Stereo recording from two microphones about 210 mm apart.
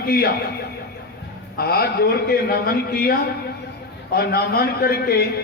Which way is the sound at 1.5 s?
45° left (ahead or behind).